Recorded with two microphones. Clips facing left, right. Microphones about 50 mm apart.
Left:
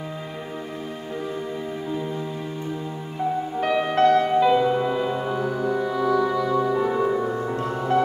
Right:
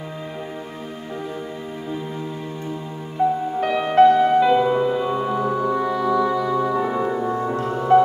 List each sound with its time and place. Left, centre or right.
3.6 s music: centre